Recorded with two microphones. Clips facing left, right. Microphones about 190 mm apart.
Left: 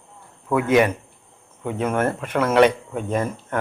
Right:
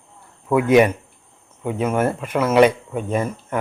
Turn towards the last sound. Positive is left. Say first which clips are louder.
# right 1 dB
turn(degrees=-10)  # may be behind; listen again after turning